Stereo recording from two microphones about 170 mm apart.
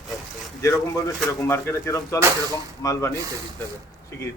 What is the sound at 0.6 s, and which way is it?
Speech, 15° left (ahead or behind).